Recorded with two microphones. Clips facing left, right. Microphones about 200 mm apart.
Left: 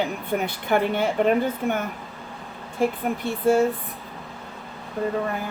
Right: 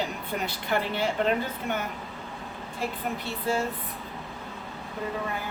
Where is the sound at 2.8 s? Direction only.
50° left (ahead or behind).